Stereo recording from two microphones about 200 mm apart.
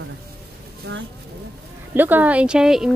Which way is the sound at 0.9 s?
60° right (ahead or behind).